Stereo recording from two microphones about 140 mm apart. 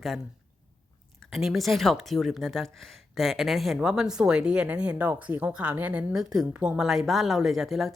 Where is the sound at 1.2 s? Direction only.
Centre (ahead or behind).